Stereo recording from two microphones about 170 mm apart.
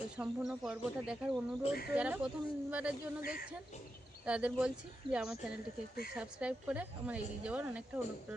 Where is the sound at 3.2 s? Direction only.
60° left (ahead or behind).